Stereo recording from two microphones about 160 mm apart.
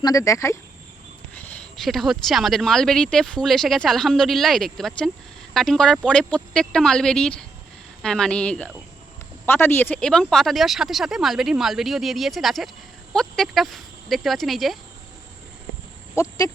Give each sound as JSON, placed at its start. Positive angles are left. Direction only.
{"t": 0.0, "sound": "speech", "side_deg": 20}
{"t": 1.4, "sound": "speech", "side_deg": 10}
{"t": 16.1, "sound": "speech", "side_deg": 20}